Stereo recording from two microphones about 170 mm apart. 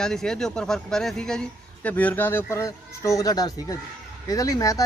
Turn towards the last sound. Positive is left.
turn(degrees=20)  # may be behind; listen again after turning